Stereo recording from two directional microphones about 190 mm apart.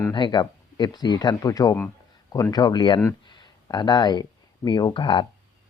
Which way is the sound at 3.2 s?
25° left (ahead or behind).